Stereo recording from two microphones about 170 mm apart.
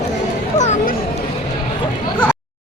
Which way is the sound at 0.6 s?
45° left (ahead or behind).